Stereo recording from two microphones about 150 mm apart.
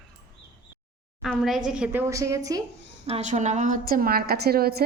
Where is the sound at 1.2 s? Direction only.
Centre (ahead or behind); by 2.6 s 20° right (ahead or behind).